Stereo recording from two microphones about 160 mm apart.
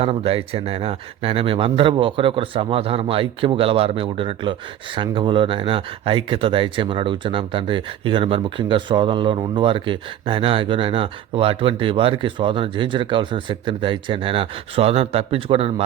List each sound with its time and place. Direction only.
0.0 s a man's voice: 35° right (ahead or behind)